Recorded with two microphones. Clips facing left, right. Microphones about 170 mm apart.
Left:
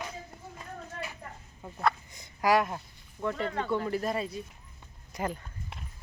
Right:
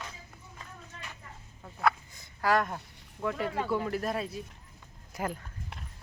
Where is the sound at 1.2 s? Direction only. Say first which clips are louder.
Left 5 dB; 55° left (ahead or behind).